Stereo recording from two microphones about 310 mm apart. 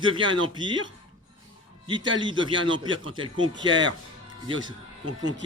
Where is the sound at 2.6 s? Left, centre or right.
Right.